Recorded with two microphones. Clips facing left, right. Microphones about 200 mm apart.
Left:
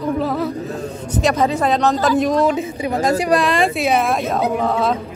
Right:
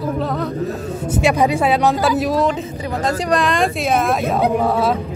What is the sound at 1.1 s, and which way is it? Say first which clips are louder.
Speech: right 1 dB; 10° right (ahead or behind).